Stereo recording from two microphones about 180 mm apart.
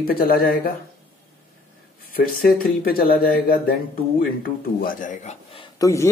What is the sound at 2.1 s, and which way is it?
Speech, 55° left (ahead or behind).